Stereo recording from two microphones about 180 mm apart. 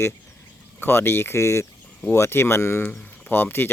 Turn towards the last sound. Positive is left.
turn(degrees=10)  # may be behind; listen again after turning